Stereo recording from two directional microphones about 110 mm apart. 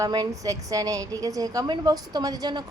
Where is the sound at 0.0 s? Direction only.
35° right (ahead or behind).